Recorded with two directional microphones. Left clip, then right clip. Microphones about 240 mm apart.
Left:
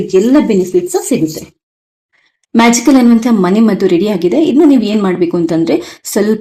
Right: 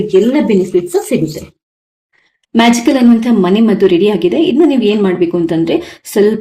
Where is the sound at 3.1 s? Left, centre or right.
Left.